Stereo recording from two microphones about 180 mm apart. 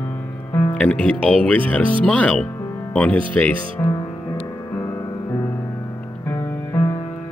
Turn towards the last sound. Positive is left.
turn(degrees=15)  # may be behind; listen again after turning